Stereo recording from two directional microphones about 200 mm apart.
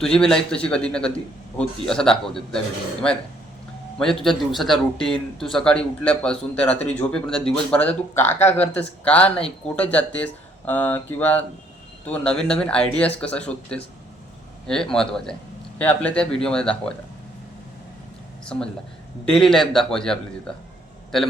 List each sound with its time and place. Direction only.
0.0 s speech: 5° left (ahead or behind)
3.9 s speech: centre (ahead or behind)
19.3 s speech: centre (ahead or behind)